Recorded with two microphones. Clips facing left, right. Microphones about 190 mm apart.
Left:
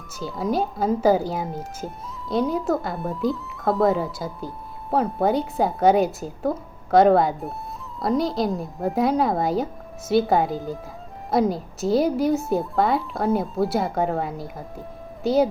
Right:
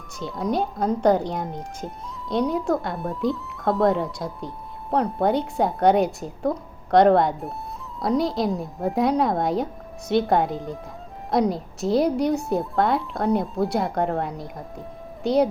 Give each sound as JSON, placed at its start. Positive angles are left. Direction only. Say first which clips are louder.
{"t": 0.2, "sound": "speech", "louder": "left 1 dB", "side_deg": 0}